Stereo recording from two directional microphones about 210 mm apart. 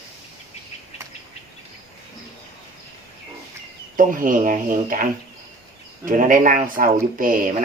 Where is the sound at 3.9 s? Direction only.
40° right (ahead or behind).